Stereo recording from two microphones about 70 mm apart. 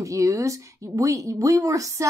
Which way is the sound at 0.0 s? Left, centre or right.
Right.